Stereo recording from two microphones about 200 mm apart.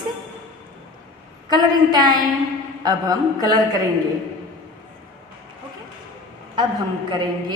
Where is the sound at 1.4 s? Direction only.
20° right (ahead or behind).